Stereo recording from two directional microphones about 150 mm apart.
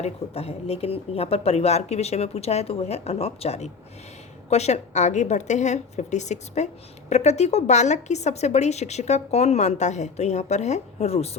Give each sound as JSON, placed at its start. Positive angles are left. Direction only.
{"t": 0.0, "sound": "a woman's voice", "side_deg": 45}